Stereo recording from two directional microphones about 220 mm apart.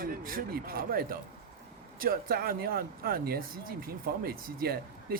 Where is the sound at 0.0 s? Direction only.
40° right (ahead or behind).